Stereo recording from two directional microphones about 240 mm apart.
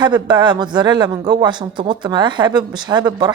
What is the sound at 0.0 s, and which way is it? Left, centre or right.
A woman's voice, centre.